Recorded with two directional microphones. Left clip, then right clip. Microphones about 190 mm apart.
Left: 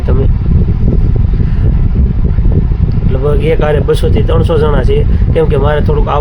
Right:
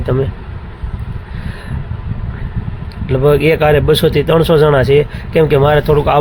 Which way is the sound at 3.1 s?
15° right (ahead or behind).